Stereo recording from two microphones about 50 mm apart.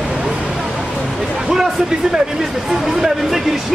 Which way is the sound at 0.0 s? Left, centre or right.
Centre.